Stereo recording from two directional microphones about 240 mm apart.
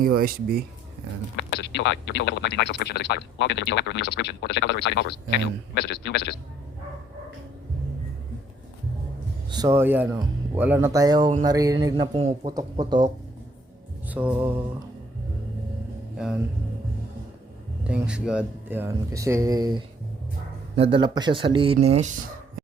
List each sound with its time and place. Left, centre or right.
0.0 s speech: right
1.4 s speech: left
9.5 s speech: centre
14.1 s speech: centre
16.1 s speech: centre
17.8 s speech: centre
20.7 s speech: right